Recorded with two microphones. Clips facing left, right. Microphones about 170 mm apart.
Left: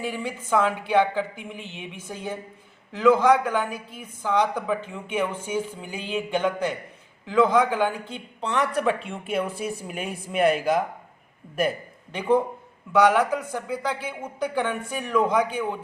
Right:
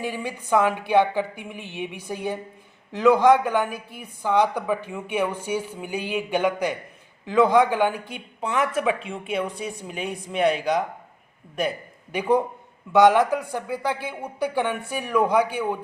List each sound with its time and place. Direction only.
0.0 s a woman's voice: 15° right (ahead or behind); by 10.8 s 5° left (ahead or behind)
12.9 s a woman's voice: 15° right (ahead or behind)